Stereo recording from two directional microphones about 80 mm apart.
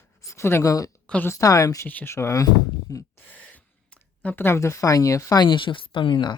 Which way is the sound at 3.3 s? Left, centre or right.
Centre.